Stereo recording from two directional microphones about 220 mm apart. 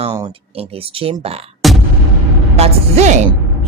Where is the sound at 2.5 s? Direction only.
30° right (ahead or behind).